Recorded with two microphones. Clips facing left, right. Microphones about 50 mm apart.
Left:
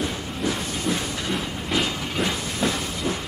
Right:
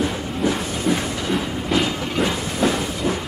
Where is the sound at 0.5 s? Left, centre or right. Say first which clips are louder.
Right 4 dB; centre.